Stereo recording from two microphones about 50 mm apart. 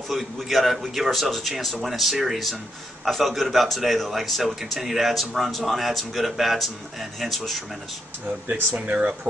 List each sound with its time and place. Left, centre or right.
0.1 s a man's voice: centre
8.8 s speech: right